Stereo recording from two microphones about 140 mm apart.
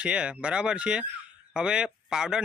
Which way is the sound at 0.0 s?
5° right (ahead or behind).